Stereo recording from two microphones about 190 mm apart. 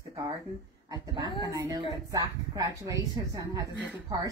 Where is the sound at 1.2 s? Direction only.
25° left (ahead or behind).